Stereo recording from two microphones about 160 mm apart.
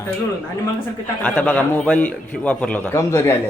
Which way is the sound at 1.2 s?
10° left (ahead or behind).